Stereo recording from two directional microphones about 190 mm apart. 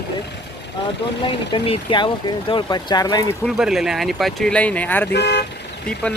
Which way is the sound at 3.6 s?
Centre (ahead or behind).